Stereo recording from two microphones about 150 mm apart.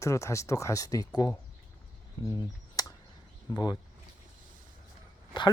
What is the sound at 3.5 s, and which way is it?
Speech, 25° left (ahead or behind).